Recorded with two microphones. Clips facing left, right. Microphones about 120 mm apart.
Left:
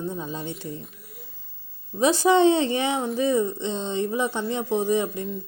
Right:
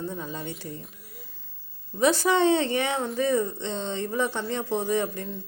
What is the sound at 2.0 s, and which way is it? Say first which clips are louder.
Speech: left 3 dB; 20° left (ahead or behind).